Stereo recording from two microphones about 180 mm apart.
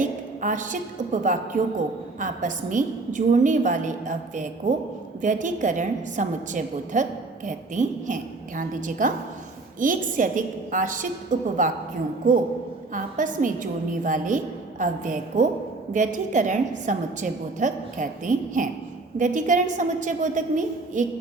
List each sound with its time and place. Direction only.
0.0 s a woman's voice: 45° right (ahead or behind)
12.9 s a woman's voice: 45° right (ahead or behind)